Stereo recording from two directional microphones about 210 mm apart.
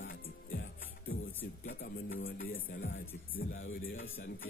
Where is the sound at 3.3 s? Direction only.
70° left (ahead or behind).